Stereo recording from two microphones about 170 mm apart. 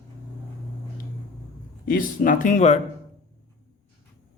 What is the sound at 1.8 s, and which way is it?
Speech, 55° left (ahead or behind).